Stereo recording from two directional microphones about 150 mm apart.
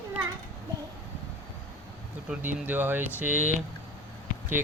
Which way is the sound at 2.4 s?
10° right (ahead or behind).